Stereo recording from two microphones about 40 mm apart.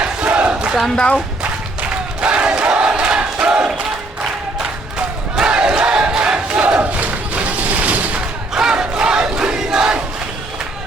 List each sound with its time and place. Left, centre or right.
0.0 s battle cry: right
0.9 s speech: left
2.2 s crowd: right
4.9 s battle cry: right
6.7 s a sound: right
8.7 s battle cry: right
9.6 s crowd: centre